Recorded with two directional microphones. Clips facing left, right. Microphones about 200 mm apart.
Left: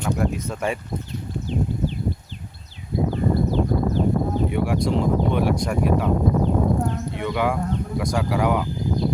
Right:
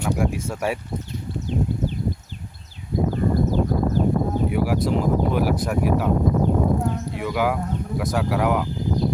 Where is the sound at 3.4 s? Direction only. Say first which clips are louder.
Even; 45° right (ahead or behind).